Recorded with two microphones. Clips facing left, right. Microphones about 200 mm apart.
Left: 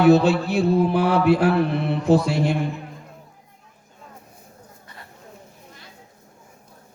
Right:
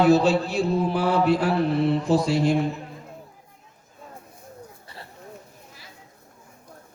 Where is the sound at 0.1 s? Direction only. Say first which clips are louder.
Left 2 dB; 60° left (ahead or behind).